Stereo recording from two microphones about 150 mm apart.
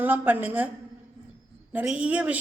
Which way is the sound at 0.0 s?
10° right (ahead or behind).